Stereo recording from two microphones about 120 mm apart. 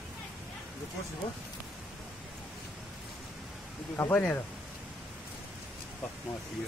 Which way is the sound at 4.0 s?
15° left (ahead or behind).